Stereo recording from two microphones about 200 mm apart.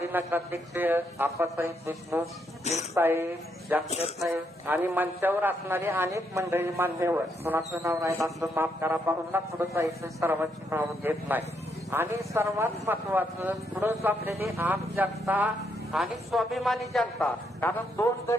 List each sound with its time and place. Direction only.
0.0 s speech: 10° right (ahead or behind)
3.8 s speech: 30° left (ahead or behind)
4.2 s speech: 5° right (ahead or behind); by 18.3 s 15° left (ahead or behind)